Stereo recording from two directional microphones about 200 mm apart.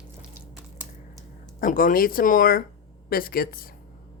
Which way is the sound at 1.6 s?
45° left (ahead or behind).